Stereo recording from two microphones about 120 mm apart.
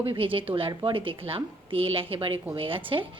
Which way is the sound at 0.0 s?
50° right (ahead or behind).